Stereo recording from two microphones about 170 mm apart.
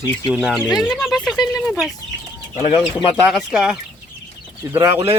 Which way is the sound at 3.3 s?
5° right (ahead or behind).